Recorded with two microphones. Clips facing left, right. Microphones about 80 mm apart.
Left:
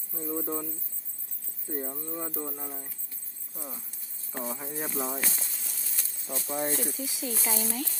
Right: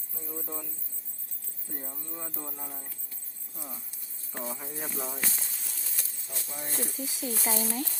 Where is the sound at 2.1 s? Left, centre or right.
Centre.